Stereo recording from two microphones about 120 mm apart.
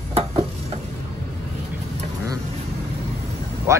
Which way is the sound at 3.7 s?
25° right (ahead or behind).